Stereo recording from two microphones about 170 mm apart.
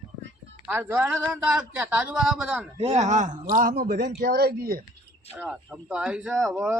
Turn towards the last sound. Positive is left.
turn(degrees=0)  # may be behind; listen again after turning